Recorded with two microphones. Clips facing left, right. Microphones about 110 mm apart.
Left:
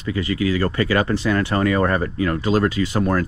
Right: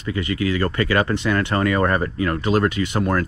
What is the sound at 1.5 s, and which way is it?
Speech, 40° right (ahead or behind).